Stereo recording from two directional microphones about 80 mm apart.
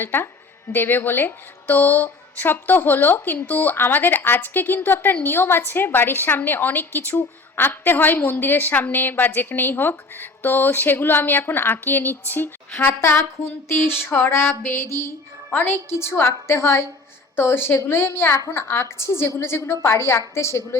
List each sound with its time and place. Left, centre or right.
0.0 s a woman's voice: left
13.7 s music: left
17.3 s a woman's voice: left
18.5 s music: left